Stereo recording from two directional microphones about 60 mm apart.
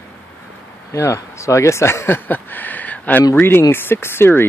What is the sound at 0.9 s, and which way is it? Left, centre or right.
Speech, left.